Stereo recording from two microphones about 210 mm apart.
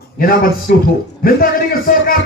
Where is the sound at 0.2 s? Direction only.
45° left (ahead or behind).